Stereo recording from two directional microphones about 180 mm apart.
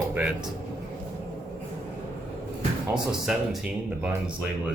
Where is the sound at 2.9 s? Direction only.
5° right (ahead or behind).